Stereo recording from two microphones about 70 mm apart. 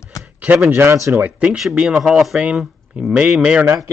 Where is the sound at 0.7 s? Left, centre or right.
Right.